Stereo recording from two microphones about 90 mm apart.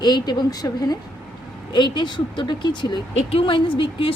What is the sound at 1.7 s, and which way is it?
Speech, 60° left (ahead or behind).